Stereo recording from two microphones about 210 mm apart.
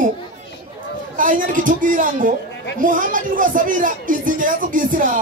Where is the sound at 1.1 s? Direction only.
40° right (ahead or behind).